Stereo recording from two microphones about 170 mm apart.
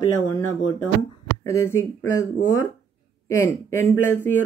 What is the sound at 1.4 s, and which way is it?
Speech, 15° left (ahead or behind).